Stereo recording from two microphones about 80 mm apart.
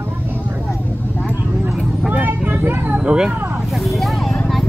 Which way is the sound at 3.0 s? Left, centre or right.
Centre.